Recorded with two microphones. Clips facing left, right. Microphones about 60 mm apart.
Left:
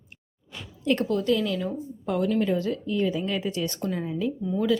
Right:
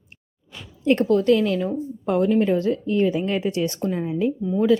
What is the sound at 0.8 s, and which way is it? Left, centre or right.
Speech, right.